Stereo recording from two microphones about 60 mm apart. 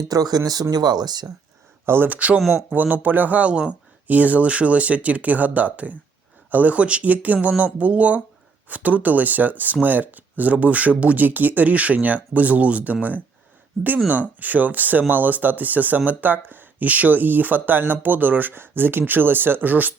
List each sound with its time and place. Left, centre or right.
0.1 s speech: right
1.9 s speech: right
2.1 s speech: right
2.4 s speech: centre
2.7 s speech: right